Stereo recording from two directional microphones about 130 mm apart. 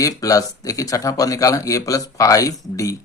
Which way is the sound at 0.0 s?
25° left (ahead or behind).